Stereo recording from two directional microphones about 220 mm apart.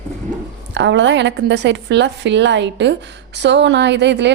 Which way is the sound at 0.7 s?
55° right (ahead or behind).